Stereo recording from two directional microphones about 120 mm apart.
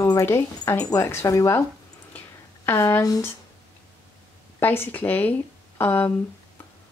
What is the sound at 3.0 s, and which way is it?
Speech, 30° left (ahead or behind).